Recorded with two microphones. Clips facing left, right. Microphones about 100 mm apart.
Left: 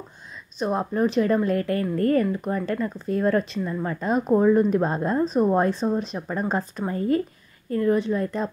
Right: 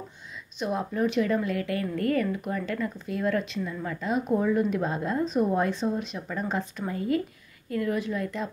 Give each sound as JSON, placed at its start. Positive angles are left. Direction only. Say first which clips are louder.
{"t": 0.6, "sound": "a woman's voice", "louder": "left 4 dB", "side_deg": 40}